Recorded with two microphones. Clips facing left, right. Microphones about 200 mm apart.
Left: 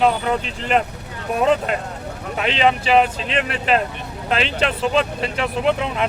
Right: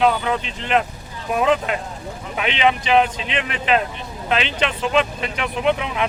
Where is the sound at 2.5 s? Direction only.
40° left (ahead or behind).